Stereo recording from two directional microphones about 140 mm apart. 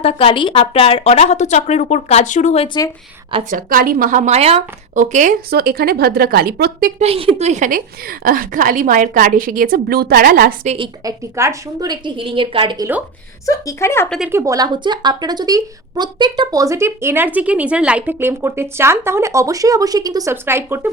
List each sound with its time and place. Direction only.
0.0 s speech: 45° left (ahead or behind)
3.5 s speech: 90° right; by 4.6 s 50° right (ahead or behind)
4.9 s a woman's voice: 60° right (ahead or behind); by 6.9 s 90° right
7.0 s a woman's voice: 45° right (ahead or behind); by 7.8 s 60° right (ahead or behind)
8.2 s a woman's voice: 90° right
11.0 s a woman's voice: 25° right (ahead or behind)
13.4 s a woman's voice: 25° left (ahead or behind)
14.3 s a woman's voice: 20° right (ahead or behind)
20.3 s speech: 15° right (ahead or behind)